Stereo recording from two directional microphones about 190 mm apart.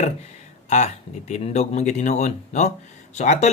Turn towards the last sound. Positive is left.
turn(degrees=35)  # may be behind; listen again after turning